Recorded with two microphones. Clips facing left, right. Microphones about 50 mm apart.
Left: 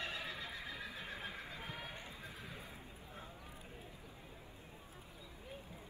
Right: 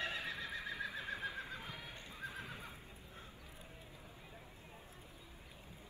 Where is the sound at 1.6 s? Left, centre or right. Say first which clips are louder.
Left 2 dB; left.